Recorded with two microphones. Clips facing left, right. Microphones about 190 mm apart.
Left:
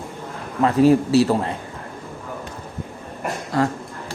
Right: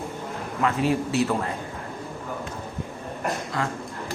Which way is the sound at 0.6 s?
35° left (ahead or behind).